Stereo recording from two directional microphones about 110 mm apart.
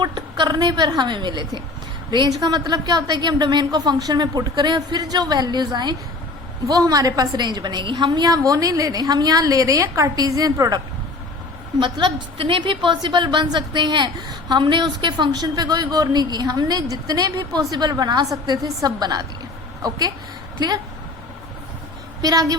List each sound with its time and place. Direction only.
0.0 s a woman's voice: 40° right (ahead or behind)
11.8 s a woman's voice: 45° right (ahead or behind)
22.2 s a woman's voice: 35° right (ahead or behind)